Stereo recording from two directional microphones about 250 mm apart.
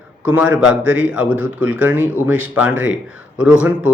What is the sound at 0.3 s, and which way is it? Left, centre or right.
A man's voice, centre.